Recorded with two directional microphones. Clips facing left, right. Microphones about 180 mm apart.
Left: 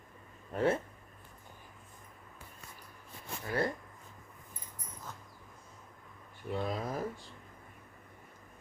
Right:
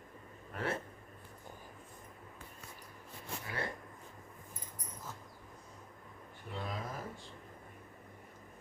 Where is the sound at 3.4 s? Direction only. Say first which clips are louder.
Left 9 dB; 40° left (ahead or behind).